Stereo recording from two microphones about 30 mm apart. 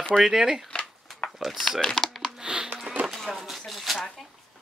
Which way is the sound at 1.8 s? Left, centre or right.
Centre.